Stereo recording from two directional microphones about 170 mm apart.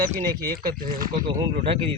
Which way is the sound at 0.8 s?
55° right (ahead or behind).